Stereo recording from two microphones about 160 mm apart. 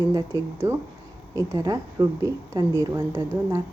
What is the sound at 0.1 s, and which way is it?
A woman's voice, 20° right (ahead or behind).